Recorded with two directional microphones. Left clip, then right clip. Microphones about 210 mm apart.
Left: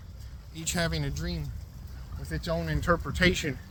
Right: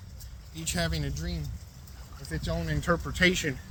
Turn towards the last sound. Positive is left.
turn(degrees=20)  # may be behind; listen again after turning